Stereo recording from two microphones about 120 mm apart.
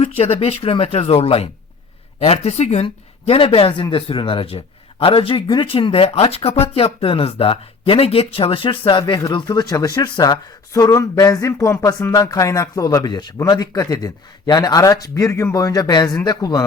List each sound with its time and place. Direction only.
0.0 s speech: 55° left (ahead or behind)
2.8 s a man's voice: 50° left (ahead or behind); by 16.6 s 35° left (ahead or behind)